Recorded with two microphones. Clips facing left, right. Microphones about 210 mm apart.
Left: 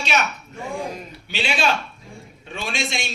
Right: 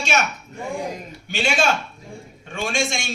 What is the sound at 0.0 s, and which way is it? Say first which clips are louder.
Speech: right 1 dB; 45° right (ahead or behind).